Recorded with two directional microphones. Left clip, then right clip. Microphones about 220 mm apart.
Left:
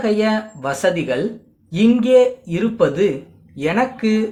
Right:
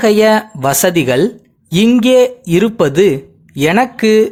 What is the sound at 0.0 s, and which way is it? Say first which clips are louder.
Speech: right 9 dB; 45° right (ahead or behind).